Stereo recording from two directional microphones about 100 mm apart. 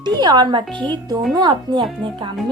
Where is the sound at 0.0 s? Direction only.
45° right (ahead or behind).